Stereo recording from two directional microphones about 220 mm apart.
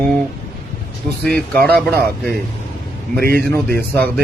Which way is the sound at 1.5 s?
5° left (ahead or behind).